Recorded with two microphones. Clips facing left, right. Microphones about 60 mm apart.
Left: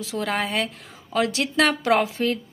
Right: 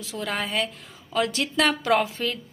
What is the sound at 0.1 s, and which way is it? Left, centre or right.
Speech, left.